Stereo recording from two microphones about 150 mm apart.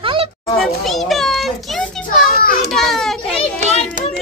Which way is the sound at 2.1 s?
65° left (ahead or behind).